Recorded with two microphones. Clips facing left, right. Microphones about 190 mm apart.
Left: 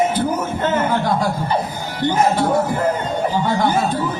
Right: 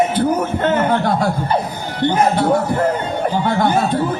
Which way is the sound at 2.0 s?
60° right (ahead or behind).